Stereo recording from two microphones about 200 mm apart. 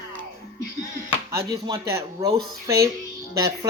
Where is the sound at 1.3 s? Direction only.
15° right (ahead or behind).